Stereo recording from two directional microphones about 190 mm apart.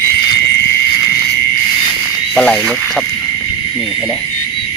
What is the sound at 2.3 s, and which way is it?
Speech, 5° left (ahead or behind).